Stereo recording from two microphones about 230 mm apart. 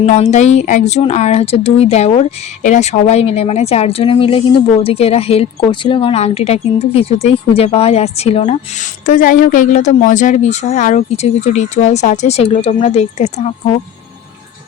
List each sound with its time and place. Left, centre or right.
0.0 s a woman's voice: left